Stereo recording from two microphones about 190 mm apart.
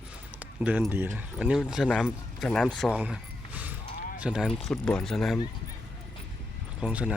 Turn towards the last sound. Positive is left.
turn(degrees=-5)  # may be behind; listen again after turning